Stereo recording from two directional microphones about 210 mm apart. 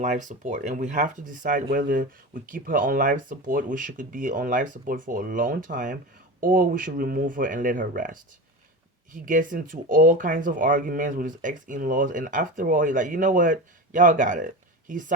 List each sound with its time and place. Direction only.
0.0 s speech: 35° right (ahead or behind)